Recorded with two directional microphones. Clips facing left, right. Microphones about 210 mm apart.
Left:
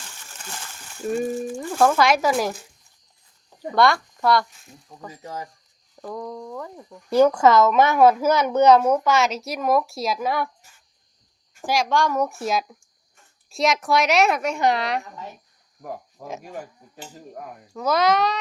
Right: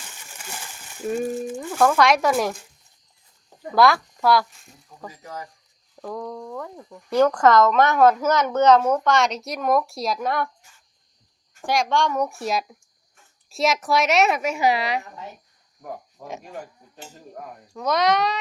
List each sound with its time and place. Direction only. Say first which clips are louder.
0.2 s a sound: right 1 dB; 10° right (ahead or behind)
1.5 s speech: even; centre (ahead or behind)
3.7 s speech: right 1 dB; centre (ahead or behind)
5.2 s speech: left 3 dB; 30° left (ahead or behind)
6.0 s speech: right 1 dB; 5° left (ahead or behind)
11.6 s speech: even; centre (ahead or behind)